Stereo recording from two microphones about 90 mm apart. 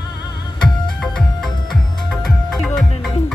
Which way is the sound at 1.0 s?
5° left (ahead or behind).